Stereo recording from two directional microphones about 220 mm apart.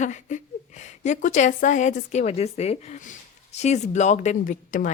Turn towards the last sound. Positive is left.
turn(degrees=35)  # may be behind; listen again after turning